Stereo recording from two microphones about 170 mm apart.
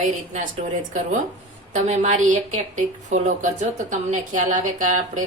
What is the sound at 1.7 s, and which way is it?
A woman's voice, 45° right (ahead or behind).